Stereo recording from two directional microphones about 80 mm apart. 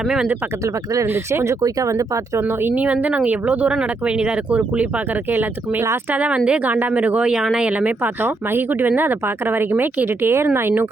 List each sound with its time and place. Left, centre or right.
0.0 s speech: centre
1.0 s speech: right
2.5 s speech: right
5.8 s speech: right
6.1 s speech: centre